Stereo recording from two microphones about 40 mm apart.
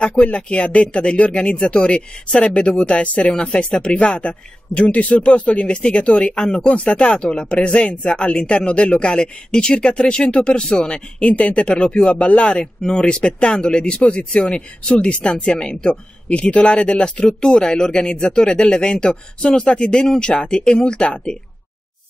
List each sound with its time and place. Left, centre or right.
0.2 s speech: left